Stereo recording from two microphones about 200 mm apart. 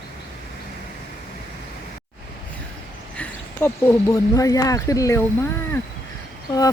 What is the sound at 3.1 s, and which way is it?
Speech, 10° left (ahead or behind).